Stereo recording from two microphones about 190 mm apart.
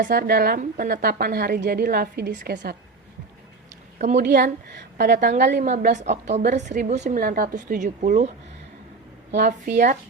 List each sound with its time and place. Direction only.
0.0 s a woman's voice: 50° right (ahead or behind)
3.9 s a woman's voice: 40° right (ahead or behind)
4.2 s a woman's voice: 55° right (ahead or behind)
5.6 s a woman's voice: 40° right (ahead or behind)
9.5 s a woman's voice: 45° right (ahead or behind)